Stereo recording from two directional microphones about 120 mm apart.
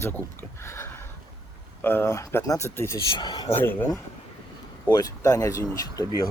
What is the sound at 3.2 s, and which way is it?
Speech, 35° left (ahead or behind).